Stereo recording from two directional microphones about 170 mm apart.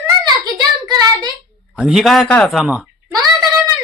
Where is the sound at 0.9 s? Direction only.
25° right (ahead or behind).